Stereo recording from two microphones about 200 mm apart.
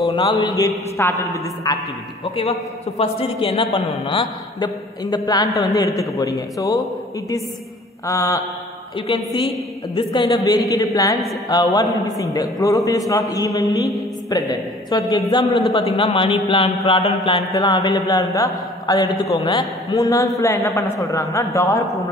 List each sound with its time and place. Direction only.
0.0 s a man's voice: 20° left (ahead or behind)
3.0 s a man's voice: 30° left (ahead or behind)
8.1 s a man's voice: 15° left (ahead or behind)